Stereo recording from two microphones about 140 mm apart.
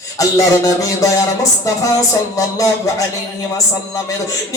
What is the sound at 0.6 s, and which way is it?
A man's voice, 25° left (ahead or behind).